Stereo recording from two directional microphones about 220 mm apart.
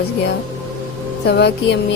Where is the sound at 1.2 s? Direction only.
50° left (ahead or behind).